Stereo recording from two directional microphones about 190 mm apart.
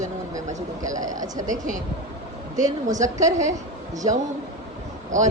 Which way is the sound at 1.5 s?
40° right (ahead or behind).